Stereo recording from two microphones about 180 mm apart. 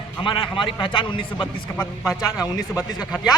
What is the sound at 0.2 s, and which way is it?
A man's voice, 25° left (ahead or behind).